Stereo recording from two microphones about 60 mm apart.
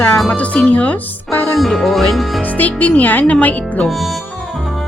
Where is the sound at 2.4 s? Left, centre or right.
Left.